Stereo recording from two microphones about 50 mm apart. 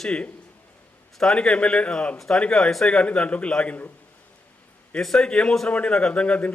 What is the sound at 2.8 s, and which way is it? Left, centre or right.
Speech, left.